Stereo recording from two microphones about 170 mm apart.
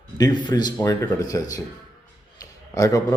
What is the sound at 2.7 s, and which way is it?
Speech, 20° left (ahead or behind).